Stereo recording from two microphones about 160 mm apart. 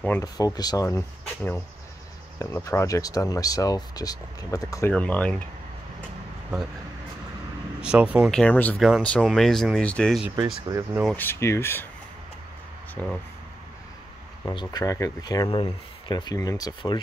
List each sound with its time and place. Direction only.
0.2 s speech: 20° left (ahead or behind)
4.9 s speech: 10° left (ahead or behind)
7.8 s speech: 5° right (ahead or behind)
8.3 s speech: 5° left (ahead or behind)
8.7 s speech: centre (ahead or behind)
10.7 s speech: 20° right (ahead or behind)
11.1 s speech: 10° left (ahead or behind)
12.9 s speech: 5° left (ahead or behind)
14.4 s speech: 25° left (ahead or behind)